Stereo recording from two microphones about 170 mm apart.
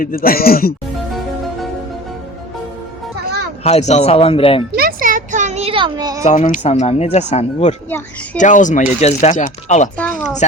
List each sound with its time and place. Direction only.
0.0 s speech: 55° left (ahead or behind)
3.6 s speech: 40° left (ahead or behind)
4.7 s a child's voice: 60° right (ahead or behind); by 6.2 s 25° right (ahead or behind)
6.2 s speech: 50° left (ahead or behind)